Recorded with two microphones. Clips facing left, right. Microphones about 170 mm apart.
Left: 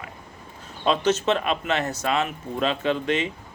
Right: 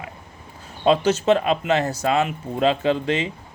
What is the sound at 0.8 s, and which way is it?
Speech, 30° right (ahead or behind).